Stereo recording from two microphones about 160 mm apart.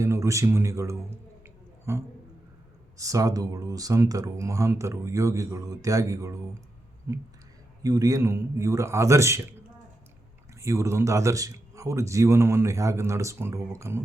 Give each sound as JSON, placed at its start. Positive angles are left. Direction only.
{"t": 0.0, "sound": "a man's voice", "side_deg": -20}
{"t": 7.8, "sound": "speech", "side_deg": -20}
{"t": 10.6, "sound": "speech", "side_deg": -20}